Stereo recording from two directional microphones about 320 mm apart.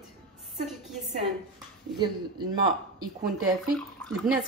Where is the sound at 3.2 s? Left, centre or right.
Centre.